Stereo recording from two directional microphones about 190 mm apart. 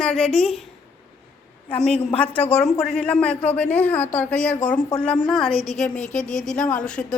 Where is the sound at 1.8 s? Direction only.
5° left (ahead or behind).